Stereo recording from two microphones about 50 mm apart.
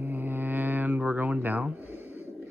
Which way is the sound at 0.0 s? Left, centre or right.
Right.